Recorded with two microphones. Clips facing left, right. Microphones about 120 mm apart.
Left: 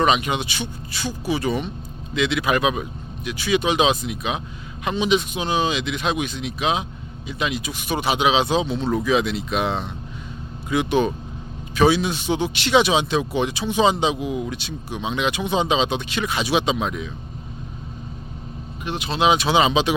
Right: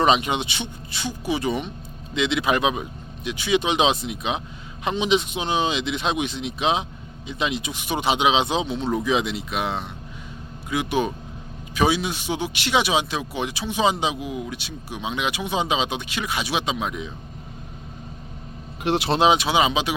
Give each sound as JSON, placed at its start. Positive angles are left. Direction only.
{"t": 0.0, "sound": "a man's voice", "side_deg": -30}
{"t": 18.8, "sound": "speech", "side_deg": -80}
{"t": 19.4, "sound": "a man's voice", "side_deg": -10}